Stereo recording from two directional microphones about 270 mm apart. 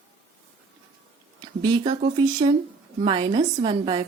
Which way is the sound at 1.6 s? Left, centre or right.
Centre.